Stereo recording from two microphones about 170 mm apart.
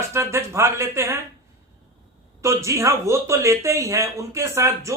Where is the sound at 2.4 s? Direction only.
15° right (ahead or behind).